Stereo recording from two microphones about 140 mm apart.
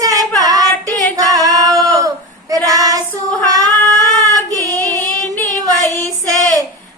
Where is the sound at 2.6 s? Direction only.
25° right (ahead or behind).